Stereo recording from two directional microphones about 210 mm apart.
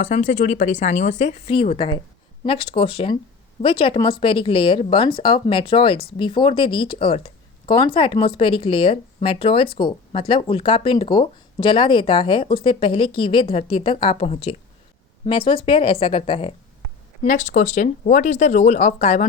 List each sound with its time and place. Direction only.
0.0 s speech: 35° left (ahead or behind)
17.2 s speech: 35° left (ahead or behind)